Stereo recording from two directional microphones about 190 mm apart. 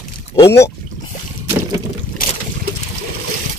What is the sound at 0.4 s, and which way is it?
Speech, 15° left (ahead or behind).